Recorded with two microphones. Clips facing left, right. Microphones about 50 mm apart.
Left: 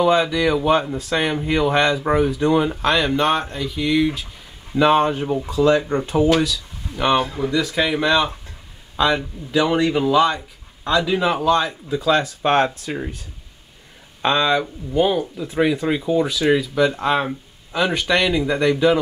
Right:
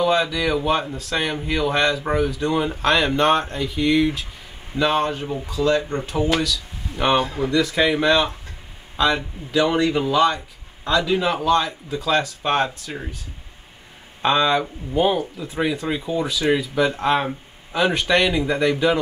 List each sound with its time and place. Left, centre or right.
0.0 s speech: centre
4.7 s speech: centre
7.0 s speech: centre
12.4 s speech: left
14.2 s speech: centre